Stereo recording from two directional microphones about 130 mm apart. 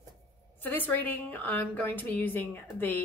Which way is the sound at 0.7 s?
15° left (ahead or behind).